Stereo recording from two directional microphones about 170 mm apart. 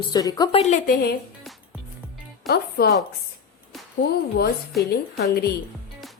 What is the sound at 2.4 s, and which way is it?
Speech, 65° left (ahead or behind).